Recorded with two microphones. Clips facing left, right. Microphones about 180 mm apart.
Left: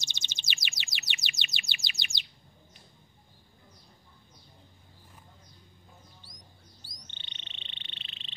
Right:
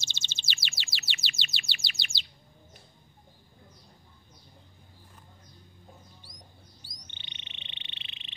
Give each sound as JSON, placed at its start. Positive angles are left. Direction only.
{"t": 0.0, "sound": "chirp", "side_deg": 15}
{"t": 7.0, "sound": "frog", "side_deg": -15}